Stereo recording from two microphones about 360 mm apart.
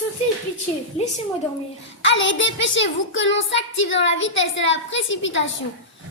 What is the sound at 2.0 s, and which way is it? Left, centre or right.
A woman's voice, left.